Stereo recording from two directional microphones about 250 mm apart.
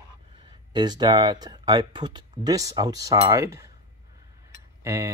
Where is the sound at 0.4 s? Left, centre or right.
Centre.